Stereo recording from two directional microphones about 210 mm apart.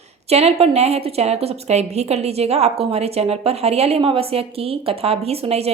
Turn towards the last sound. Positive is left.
turn(degrees=-30)  # may be behind; listen again after turning